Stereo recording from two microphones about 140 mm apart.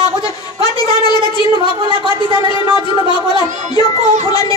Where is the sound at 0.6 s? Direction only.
30° left (ahead or behind).